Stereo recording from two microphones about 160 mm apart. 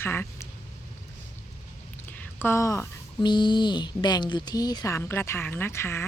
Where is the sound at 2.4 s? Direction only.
15° left (ahead or behind).